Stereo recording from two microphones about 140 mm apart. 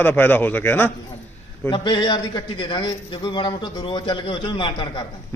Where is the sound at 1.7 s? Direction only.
35° left (ahead or behind).